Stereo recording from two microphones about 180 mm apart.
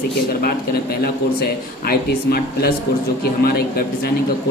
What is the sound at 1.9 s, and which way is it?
Speech, 60° left (ahead or behind).